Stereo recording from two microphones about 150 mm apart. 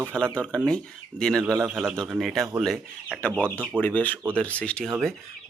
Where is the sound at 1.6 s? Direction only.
10° right (ahead or behind).